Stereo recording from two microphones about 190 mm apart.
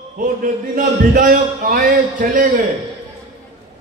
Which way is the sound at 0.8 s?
45° right (ahead or behind).